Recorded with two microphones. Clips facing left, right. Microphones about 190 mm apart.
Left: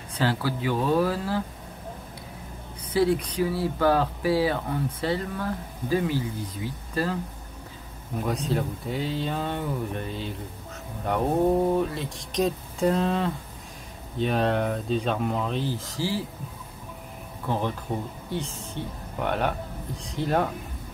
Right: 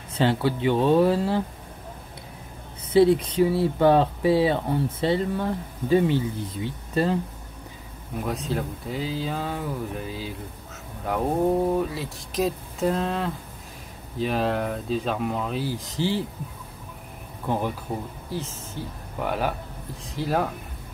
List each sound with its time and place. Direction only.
0.2 s speech: 25° right (ahead or behind)
2.9 s speech: 25° right (ahead or behind)
8.2 s speech: centre (ahead or behind); by 16.2 s 20° right (ahead or behind)
17.5 s speech: 10° right (ahead or behind)